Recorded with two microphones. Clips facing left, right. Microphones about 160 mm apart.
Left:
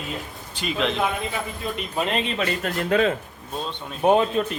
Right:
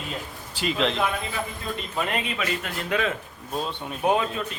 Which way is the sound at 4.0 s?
25° left (ahead or behind).